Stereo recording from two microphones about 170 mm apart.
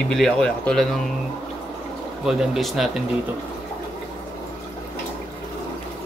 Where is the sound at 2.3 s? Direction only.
Centre (ahead or behind).